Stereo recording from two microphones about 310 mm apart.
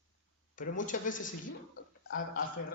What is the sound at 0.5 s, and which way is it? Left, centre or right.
Speech, left.